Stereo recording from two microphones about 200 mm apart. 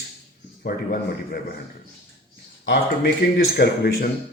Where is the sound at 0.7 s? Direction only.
50° left (ahead or behind).